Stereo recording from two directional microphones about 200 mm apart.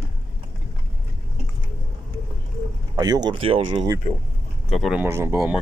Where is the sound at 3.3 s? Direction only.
25° right (ahead or behind).